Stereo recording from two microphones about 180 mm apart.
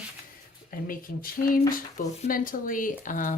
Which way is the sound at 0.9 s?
50° left (ahead or behind).